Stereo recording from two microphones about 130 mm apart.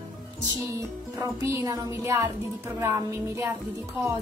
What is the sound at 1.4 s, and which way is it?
A woman's voice, 20° right (ahead or behind).